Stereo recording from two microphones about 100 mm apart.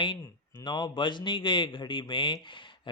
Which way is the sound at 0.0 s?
50° left (ahead or behind).